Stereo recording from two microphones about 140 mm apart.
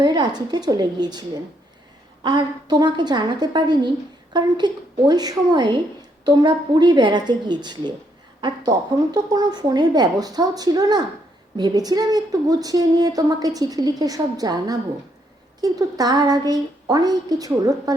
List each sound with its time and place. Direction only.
0.0 s a woman's voice: 30° right (ahead or behind)
2.2 s a woman's voice: 30° right (ahead or behind)